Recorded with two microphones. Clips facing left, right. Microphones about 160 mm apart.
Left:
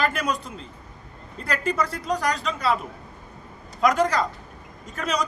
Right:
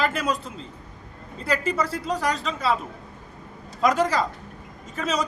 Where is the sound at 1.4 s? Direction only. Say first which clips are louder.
Right 1 dB; 5° right (ahead or behind).